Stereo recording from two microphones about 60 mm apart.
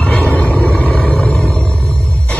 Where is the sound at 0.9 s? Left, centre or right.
Centre.